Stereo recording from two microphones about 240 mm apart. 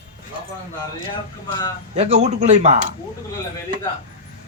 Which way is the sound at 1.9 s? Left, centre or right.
Right.